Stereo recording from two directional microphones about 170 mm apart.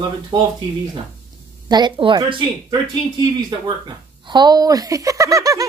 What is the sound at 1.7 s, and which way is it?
Speech, 25° right (ahead or behind).